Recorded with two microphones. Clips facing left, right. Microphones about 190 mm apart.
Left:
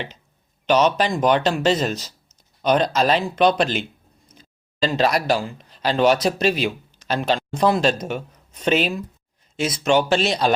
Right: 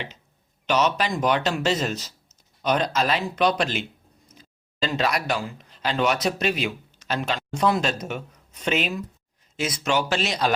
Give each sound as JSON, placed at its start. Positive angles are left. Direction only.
{"t": 0.7, "sound": "speech", "side_deg": 30}